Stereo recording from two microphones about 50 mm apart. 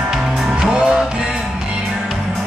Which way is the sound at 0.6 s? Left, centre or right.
Centre.